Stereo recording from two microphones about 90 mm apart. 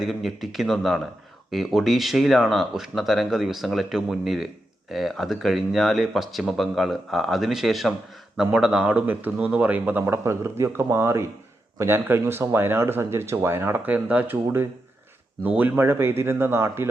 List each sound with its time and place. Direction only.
0.0 s speech: centre (ahead or behind); by 16.9 s 30° right (ahead or behind)